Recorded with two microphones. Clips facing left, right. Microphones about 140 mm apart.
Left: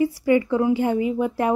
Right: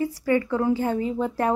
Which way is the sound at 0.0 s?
15° left (ahead or behind).